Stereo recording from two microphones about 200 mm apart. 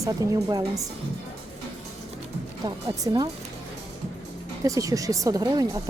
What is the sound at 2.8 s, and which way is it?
Speech, 20° right (ahead or behind).